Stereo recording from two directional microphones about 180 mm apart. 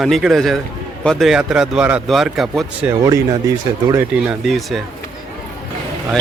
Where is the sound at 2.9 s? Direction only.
15° right (ahead or behind).